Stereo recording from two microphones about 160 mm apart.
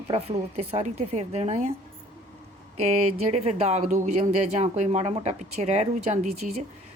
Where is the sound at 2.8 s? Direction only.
45° right (ahead or behind).